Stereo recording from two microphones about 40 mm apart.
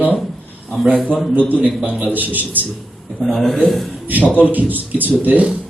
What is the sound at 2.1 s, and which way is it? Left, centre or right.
Speech, right.